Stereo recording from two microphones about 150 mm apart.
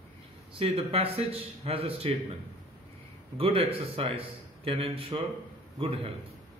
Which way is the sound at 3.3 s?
35° right (ahead or behind).